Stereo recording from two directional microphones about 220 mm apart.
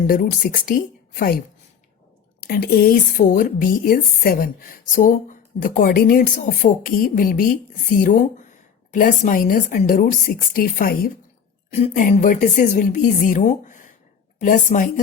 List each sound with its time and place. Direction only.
0.1 s speech: 40° left (ahead or behind)
2.5 s speech: 45° left (ahead or behind)